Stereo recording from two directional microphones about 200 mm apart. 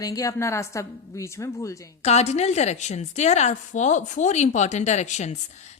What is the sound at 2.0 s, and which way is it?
A woman's voice, 35° left (ahead or behind).